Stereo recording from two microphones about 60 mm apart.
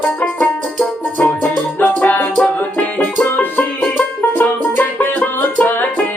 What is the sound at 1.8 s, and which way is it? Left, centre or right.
Music, left.